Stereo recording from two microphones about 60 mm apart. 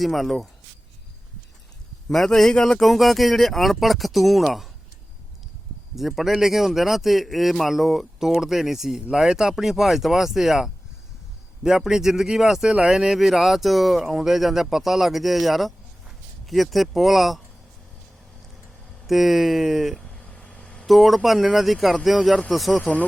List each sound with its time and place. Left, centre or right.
0.0 s speech: centre
2.0 s speech: centre
6.0 s speech: centre
19.0 s speech: centre
20.1 s vehicle: centre
20.8 s speech: centre
22.8 s speech: left